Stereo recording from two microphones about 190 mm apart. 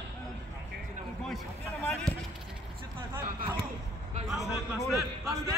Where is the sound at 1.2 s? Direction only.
5° left (ahead or behind).